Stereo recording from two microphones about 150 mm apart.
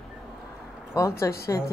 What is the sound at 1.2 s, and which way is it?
Speech, 20° left (ahead or behind).